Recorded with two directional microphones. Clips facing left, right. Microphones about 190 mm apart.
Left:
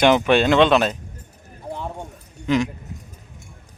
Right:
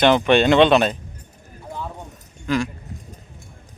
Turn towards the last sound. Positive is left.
turn(degrees=20)  # may be behind; listen again after turning